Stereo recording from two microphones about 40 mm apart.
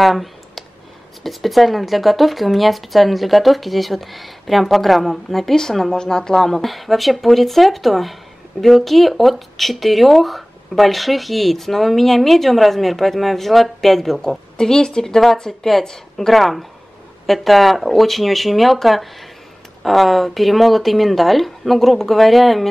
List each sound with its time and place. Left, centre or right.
0.0 s clicking: centre
1.2 s speech: centre
14.6 s a woman's voice: centre